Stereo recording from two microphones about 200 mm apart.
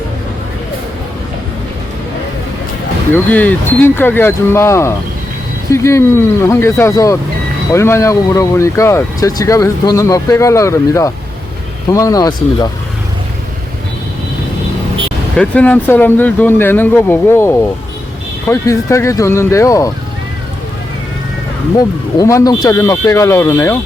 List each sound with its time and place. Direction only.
3.2 s speech: 10° left (ahead or behind)
15.4 s speech: 5° left (ahead or behind)
22.2 s speech: 15° left (ahead or behind)